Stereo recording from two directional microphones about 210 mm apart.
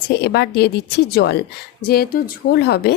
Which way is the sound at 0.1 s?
50° left (ahead or behind).